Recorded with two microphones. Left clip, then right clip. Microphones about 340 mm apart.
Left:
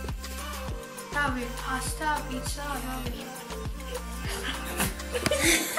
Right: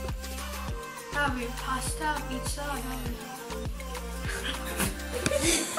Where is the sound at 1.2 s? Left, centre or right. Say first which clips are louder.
Left 1 dB; centre.